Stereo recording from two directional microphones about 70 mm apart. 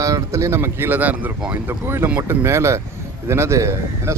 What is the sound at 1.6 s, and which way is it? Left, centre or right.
A man's voice, right.